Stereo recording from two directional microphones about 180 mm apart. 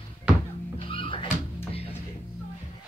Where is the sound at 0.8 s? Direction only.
30° left (ahead or behind).